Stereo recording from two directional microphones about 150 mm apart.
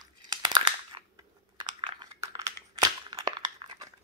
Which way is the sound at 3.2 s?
30° right (ahead or behind).